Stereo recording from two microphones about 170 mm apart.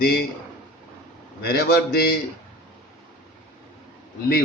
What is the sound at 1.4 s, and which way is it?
Speech, 65° left (ahead or behind).